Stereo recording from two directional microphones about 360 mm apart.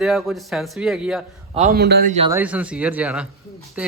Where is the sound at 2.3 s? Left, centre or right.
Centre.